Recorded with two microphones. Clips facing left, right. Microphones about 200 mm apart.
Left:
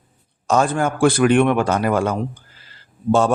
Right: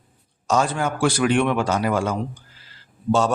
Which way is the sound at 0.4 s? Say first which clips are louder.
Left 3 dB; 55° left (ahead or behind).